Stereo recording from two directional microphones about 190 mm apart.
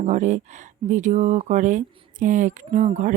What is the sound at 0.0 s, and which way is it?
Speech, 40° right (ahead or behind).